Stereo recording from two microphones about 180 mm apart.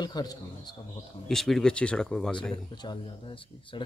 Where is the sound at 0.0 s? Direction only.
20° left (ahead or behind).